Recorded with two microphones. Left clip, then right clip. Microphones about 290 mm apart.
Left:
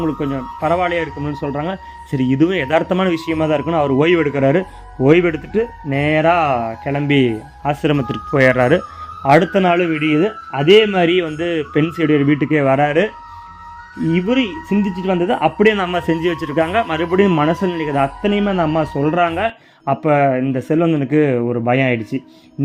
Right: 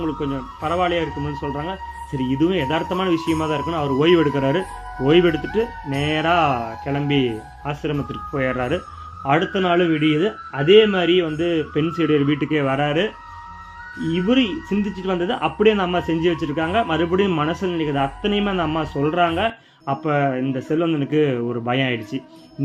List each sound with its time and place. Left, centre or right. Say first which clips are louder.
0.0 s speech: left 4 dB; left
14.1 s speech: left 2 dB; centre